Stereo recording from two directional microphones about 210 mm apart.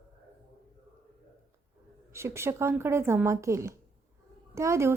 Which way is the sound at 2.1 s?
10° right (ahead or behind).